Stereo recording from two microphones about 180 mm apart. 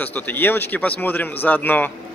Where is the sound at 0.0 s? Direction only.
10° left (ahead or behind).